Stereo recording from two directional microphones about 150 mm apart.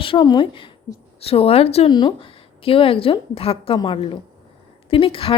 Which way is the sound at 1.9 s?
30° left (ahead or behind).